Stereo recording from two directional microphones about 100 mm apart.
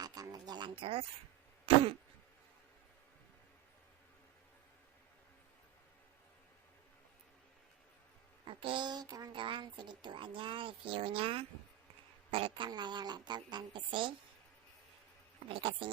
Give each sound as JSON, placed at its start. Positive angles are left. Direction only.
{"t": 0.0, "sound": "a sound", "side_deg": -40}
{"t": 0.8, "sound": "speech", "side_deg": -70}
{"t": 1.6, "sound": "throat clearing", "side_deg": -70}
{"t": 8.4, "sound": "speech", "side_deg": -60}
{"t": 9.3, "sound": "speech", "side_deg": -55}
{"t": 15.4, "sound": "speech", "side_deg": -60}